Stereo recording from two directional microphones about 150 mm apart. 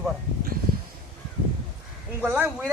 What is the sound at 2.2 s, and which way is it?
Speech, 10° right (ahead or behind).